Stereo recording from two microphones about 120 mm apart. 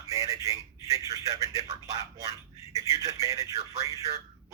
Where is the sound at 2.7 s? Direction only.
30° right (ahead or behind).